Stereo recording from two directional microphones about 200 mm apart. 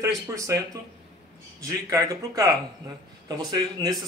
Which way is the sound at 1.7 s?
15° right (ahead or behind).